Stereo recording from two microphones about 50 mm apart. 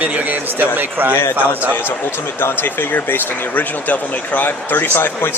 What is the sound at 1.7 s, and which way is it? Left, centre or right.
Speech, left.